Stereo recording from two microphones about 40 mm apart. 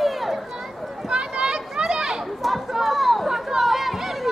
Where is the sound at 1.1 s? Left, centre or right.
Right.